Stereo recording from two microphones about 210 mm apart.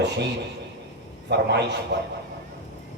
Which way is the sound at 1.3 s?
55° right (ahead or behind).